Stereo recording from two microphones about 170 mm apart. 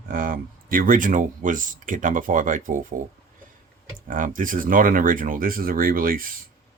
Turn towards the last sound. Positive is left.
turn(degrees=-55)  # may be behind; listen again after turning